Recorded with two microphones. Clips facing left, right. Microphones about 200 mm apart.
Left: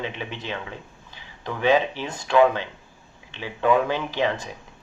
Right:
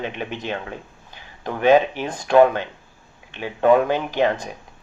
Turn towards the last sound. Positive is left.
turn(degrees=-45)  # may be behind; listen again after turning